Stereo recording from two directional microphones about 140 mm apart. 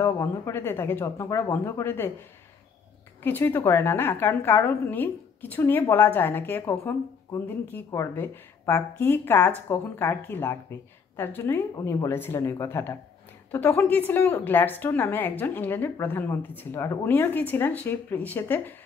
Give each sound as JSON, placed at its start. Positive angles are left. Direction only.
{"t": 0.0, "sound": "a woman's voice", "side_deg": 20}
{"t": 3.3, "sound": "a woman's voice", "side_deg": 15}